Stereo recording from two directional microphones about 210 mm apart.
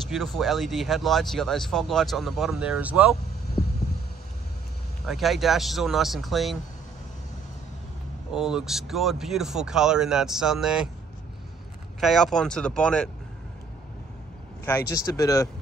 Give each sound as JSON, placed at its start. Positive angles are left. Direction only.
{"t": 0.1, "sound": "speech", "side_deg": 0}
{"t": 5.0, "sound": "speech", "side_deg": 0}
{"t": 8.4, "sound": "speech", "side_deg": 0}
{"t": 12.0, "sound": "speech", "side_deg": 0}
{"t": 14.9, "sound": "speech", "side_deg": 15}